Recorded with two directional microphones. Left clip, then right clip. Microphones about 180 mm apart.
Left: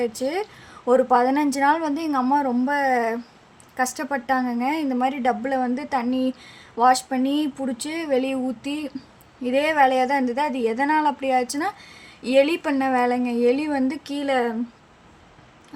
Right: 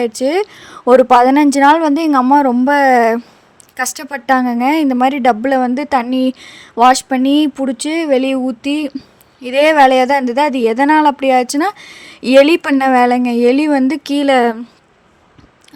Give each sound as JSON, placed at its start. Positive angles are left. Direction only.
{"t": 0.0, "sound": "a woman's voice", "side_deg": -50}